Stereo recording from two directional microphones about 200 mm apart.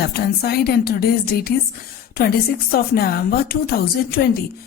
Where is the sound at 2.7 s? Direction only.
50° left (ahead or behind).